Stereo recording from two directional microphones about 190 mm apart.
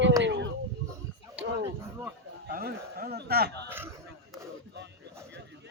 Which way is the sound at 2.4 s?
50° right (ahead or behind).